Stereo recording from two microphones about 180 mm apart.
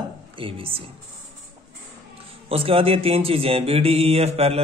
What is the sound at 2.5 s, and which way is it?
Speech, 30° right (ahead or behind).